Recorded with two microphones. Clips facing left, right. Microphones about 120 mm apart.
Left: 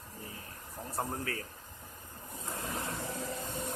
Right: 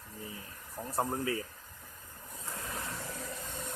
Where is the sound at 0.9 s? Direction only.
15° right (ahead or behind).